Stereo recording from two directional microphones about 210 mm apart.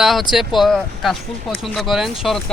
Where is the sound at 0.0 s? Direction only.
Centre (ahead or behind).